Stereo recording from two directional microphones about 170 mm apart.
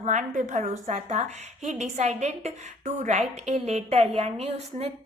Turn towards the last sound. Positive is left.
turn(degrees=-40)  # may be behind; listen again after turning